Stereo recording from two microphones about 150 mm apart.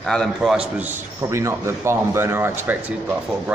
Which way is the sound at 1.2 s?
20° right (ahead or behind).